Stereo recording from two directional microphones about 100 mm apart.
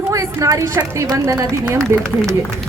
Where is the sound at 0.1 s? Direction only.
35° right (ahead or behind).